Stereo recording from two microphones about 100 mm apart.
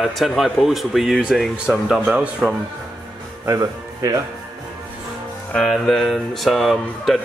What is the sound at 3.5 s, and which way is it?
Speech, 35° right (ahead or behind).